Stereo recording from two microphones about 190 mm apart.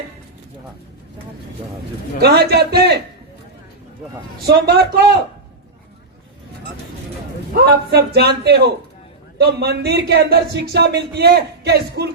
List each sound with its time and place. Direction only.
2.1 s speech: 55° right (ahead or behind)
4.4 s speech: 55° right (ahead or behind)
7.5 s speech: 60° right (ahead or behind)